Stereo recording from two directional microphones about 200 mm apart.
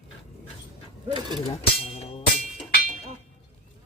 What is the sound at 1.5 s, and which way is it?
Music, 30° left (ahead or behind).